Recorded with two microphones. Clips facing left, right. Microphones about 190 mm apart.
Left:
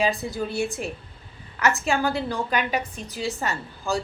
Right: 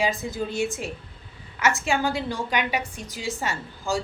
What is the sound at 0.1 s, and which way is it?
Speech, 35° left (ahead or behind).